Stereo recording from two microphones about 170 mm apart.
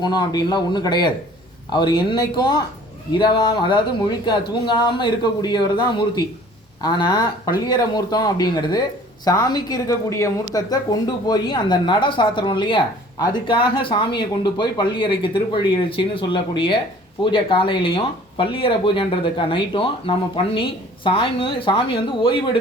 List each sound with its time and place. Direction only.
0.0 s a woman's voice: 25° left (ahead or behind)